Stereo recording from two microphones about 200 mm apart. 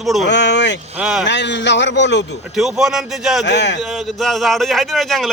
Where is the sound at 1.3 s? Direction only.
60° left (ahead or behind).